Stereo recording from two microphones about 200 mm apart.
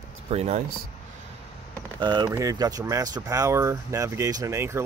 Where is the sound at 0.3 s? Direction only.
35° right (ahead or behind).